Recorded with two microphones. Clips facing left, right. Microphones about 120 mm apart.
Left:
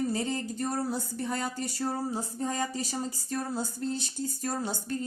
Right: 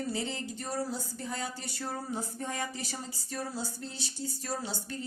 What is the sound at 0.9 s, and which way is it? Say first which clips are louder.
Speech: left 5 dB; 55° left (ahead or behind).